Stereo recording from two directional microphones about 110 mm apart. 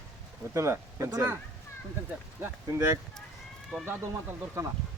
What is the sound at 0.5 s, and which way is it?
Speech, 25° right (ahead or behind).